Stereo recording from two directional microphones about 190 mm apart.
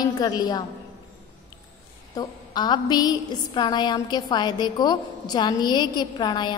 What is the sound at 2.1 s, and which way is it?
A woman's voice, 20° left (ahead or behind).